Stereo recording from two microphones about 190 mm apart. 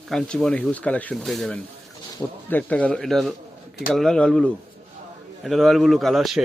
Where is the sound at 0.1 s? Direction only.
5° left (ahead or behind).